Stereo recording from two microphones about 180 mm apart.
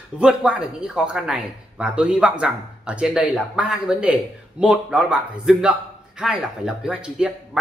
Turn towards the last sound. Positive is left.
turn(degrees=-5)  # may be behind; listen again after turning